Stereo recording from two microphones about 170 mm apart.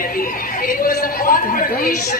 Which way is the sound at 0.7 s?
55° left (ahead or behind).